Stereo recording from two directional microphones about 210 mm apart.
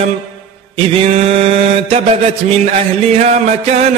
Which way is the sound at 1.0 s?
30° right (ahead or behind).